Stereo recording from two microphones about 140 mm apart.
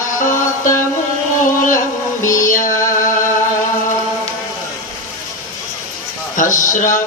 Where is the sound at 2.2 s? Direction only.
70° left (ahead or behind).